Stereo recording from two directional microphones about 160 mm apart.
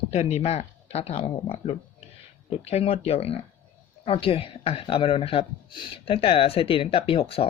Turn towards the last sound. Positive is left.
turn(degrees=35)  # may be behind; listen again after turning